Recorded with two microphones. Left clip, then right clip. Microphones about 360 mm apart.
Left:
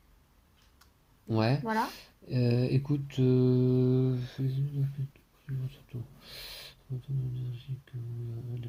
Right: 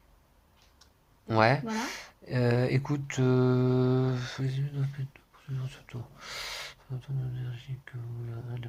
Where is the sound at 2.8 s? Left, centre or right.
Right.